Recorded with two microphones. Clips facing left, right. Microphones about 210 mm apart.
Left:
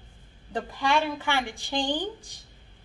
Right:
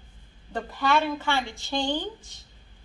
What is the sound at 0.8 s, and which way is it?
A woman's voice, 15° left (ahead or behind).